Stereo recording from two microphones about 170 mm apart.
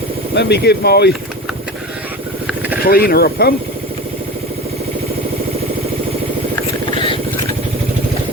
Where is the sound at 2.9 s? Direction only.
60° left (ahead or behind).